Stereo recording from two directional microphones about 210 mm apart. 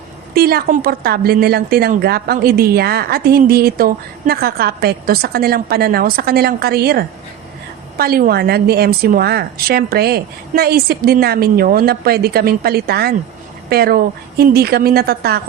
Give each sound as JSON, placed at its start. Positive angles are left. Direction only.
{"t": 0.3, "sound": "a woman's voice", "side_deg": -45}